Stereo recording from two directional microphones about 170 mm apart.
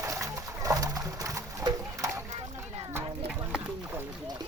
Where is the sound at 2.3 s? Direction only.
35° right (ahead or behind).